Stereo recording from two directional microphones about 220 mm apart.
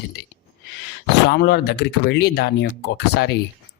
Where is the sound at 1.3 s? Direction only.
50° left (ahead or behind).